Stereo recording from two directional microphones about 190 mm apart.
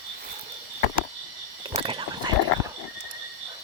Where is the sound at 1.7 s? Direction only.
30° right (ahead or behind).